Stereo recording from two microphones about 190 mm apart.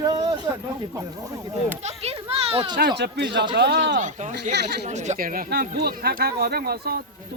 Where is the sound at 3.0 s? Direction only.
65° right (ahead or behind).